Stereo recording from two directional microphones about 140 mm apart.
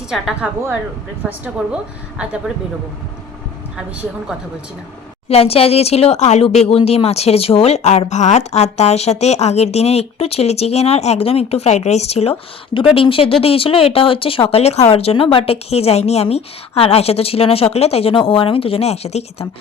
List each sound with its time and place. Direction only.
0.1 s a woman's voice: 5° right (ahead or behind)
5.3 s speech: 45° left (ahead or behind)